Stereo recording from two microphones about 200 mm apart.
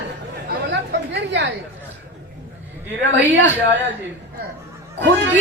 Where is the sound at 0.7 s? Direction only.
60° right (ahead or behind).